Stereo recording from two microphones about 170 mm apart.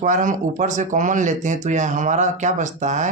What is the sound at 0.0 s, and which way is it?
Speech, 50° right (ahead or behind).